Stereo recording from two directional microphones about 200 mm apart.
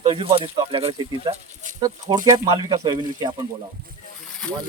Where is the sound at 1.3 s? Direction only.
40° right (ahead or behind).